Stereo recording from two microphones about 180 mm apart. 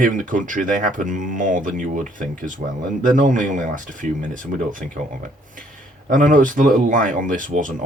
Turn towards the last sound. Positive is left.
turn(degrees=-45)  # may be behind; listen again after turning